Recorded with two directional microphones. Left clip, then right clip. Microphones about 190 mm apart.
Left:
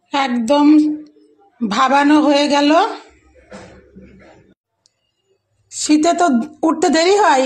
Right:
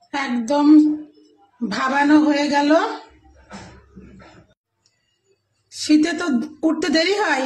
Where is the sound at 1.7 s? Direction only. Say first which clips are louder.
Left 4 dB; 25° left (ahead or behind).